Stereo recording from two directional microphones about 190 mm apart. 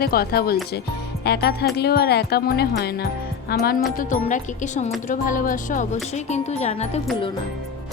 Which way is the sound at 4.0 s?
40° left (ahead or behind).